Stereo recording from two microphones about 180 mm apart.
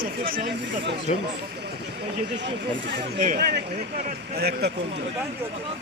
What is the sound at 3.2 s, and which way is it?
Speech, 55° right (ahead or behind).